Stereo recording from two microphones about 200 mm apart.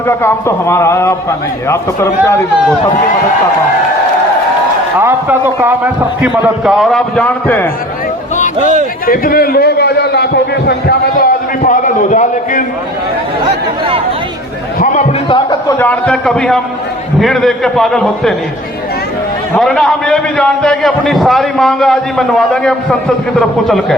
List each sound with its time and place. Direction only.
0.2 s a man's voice: 10° left (ahead or behind)
4.9 s a man's voice: 10° right (ahead or behind); by 7.7 s 10° left (ahead or behind)
9.0 s a man's voice: 45° left (ahead or behind)
15.3 s a man's voice: 20° left (ahead or behind); by 18.3 s centre (ahead or behind)
19.5 s a man's voice: centre (ahead or behind)